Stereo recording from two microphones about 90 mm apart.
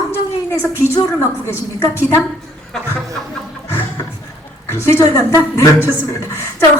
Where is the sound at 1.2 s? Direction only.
30° left (ahead or behind).